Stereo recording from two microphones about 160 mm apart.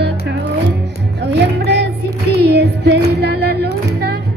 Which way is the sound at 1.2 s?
90° right.